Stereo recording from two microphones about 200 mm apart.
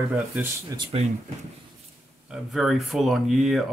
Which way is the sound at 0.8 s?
30° right (ahead or behind).